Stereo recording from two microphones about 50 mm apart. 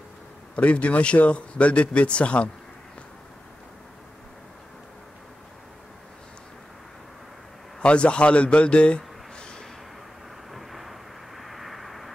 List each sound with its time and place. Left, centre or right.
0.6 s speech: left
7.8 s a man's voice: left
10.5 s vehicle: centre